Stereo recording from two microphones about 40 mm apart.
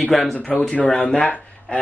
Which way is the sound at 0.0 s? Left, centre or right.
Centre.